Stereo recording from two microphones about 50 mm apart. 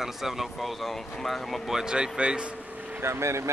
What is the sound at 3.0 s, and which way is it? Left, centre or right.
Speech, right.